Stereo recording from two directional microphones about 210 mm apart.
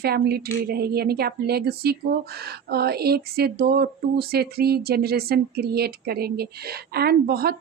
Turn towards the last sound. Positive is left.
turn(degrees=-45)  # may be behind; listen again after turning